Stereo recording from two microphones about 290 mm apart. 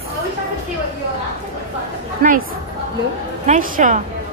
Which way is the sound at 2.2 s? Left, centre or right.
Right.